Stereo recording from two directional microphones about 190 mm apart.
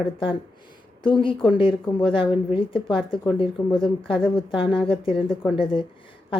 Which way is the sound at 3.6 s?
15° left (ahead or behind).